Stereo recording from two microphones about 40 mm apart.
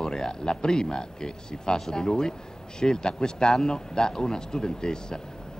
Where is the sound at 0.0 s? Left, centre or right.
Centre.